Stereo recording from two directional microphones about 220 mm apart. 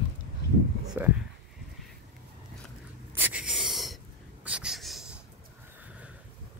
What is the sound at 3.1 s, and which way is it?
Wheeze, 5° right (ahead or behind).